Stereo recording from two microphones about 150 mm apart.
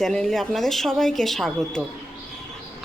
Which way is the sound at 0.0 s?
5° left (ahead or behind).